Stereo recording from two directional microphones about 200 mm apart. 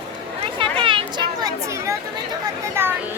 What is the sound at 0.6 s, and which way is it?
Chatter, 25° right (ahead or behind).